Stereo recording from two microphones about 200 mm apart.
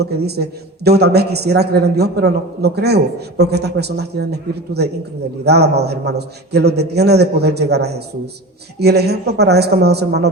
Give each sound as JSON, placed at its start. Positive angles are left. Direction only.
{"t": 0.0, "sound": "a man's voice", "side_deg": -55}